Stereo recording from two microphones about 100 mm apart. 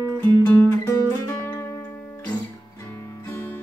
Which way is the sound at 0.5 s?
30° left (ahead or behind).